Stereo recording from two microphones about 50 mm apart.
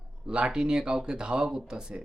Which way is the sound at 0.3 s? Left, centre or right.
Centre.